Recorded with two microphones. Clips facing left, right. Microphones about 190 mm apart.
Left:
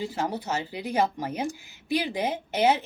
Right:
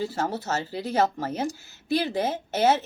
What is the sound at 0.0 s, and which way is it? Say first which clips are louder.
A woman's voice: right 1 dB; 15° left (ahead or behind).